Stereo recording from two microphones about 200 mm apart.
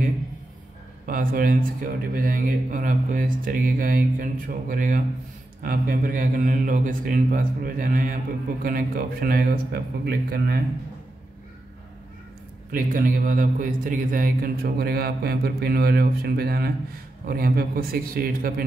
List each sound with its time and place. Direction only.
1.0 s speech: 45° right (ahead or behind)
12.7 s speech: 45° right (ahead or behind)